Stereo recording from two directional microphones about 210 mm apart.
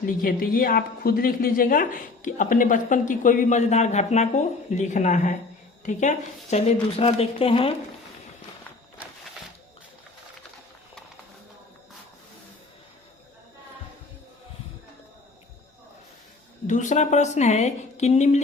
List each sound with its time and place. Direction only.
0.0 s a woman's voice: 45° left (ahead or behind); by 7.8 s 25° left (ahead or behind)
16.6 s a woman's voice: 35° left (ahead or behind)